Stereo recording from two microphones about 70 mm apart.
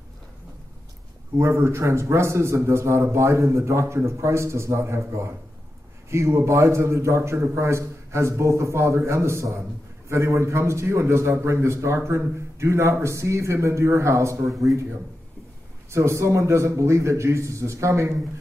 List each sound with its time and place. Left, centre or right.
1.4 s a man's voice: right
15.9 s a man's voice: right